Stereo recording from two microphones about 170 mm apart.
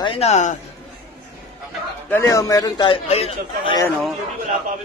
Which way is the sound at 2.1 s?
20° left (ahead or behind).